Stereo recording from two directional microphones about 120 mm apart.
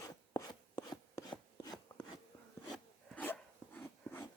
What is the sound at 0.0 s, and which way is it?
Filing, 30° left (ahead or behind).